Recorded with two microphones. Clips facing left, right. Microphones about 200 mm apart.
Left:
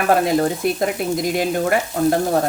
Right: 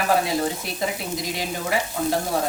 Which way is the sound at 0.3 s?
55° left (ahead or behind).